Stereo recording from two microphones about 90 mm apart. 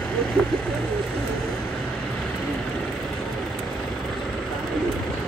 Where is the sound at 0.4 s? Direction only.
15° left (ahead or behind).